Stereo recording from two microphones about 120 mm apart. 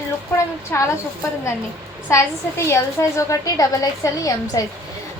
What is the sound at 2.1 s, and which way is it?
A woman's voice, 25° left (ahead or behind).